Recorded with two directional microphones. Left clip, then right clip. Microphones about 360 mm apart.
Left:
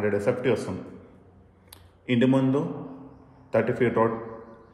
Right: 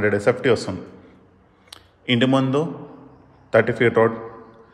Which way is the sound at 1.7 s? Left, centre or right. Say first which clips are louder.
Right 5 dB; centre.